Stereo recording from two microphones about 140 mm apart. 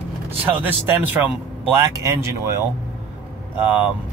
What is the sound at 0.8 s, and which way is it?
Speech, 15° right (ahead or behind).